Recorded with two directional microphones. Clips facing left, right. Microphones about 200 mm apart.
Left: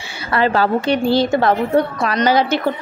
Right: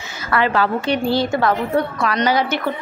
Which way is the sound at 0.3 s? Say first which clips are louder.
Left 2 dB; 35° left (ahead or behind).